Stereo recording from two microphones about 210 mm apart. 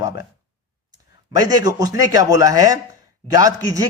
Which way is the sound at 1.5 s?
15° right (ahead or behind).